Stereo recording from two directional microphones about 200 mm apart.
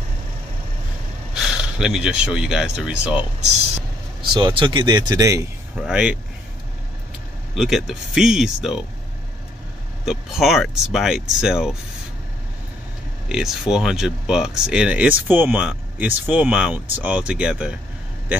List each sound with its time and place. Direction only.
1.3 s speech: 5° right (ahead or behind)
4.3 s speech: 20° right (ahead or behind)
5.8 s speech: 5° right (ahead or behind)
7.5 s speech: centre (ahead or behind)
10.0 s speech: centre (ahead or behind)
13.3 s speech: 5° right (ahead or behind)